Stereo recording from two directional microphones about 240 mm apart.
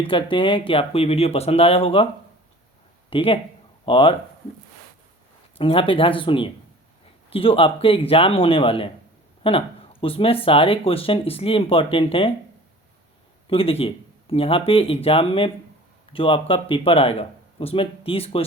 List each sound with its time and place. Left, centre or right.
0.1 s speech: left
3.1 s speech: left
5.5 s speech: left
13.5 s speech: left